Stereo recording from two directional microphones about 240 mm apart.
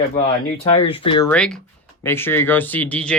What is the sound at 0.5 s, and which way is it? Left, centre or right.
Speech, left.